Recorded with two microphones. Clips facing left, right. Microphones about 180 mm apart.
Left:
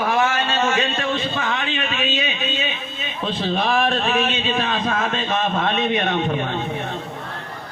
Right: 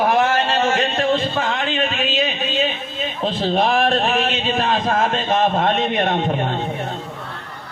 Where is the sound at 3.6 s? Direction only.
50° right (ahead or behind).